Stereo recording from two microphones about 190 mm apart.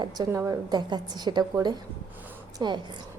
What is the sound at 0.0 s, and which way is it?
A woman's voice, 20° right (ahead or behind).